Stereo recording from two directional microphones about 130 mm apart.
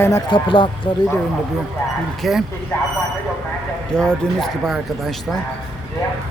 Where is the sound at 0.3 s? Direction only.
40° left (ahead or behind).